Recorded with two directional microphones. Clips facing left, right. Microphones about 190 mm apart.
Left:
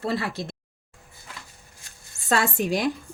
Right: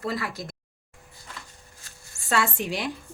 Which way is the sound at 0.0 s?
25° left (ahead or behind).